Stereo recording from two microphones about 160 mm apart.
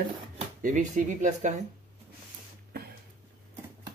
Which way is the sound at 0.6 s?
50° right (ahead or behind).